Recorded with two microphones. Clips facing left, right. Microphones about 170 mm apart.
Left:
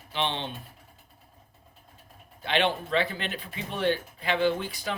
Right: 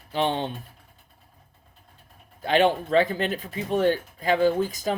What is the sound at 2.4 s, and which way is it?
Speech, 45° right (ahead or behind).